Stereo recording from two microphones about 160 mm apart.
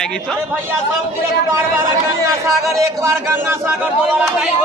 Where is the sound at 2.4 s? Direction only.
20° right (ahead or behind).